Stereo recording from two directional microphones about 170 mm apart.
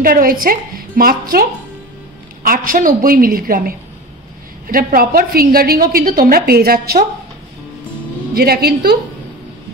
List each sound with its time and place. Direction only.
0.0 s a woman's voice: 55° right (ahead or behind)
2.4 s a woman's voice: 55° right (ahead or behind)
8.4 s a woman's voice: 65° right (ahead or behind)